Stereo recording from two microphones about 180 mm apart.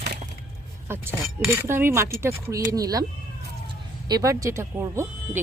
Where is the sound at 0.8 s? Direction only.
15° right (ahead or behind).